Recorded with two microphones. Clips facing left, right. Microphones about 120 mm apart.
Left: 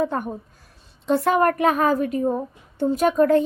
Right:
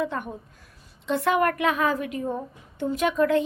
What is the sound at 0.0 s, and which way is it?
A woman's voice, 40° left (ahead or behind).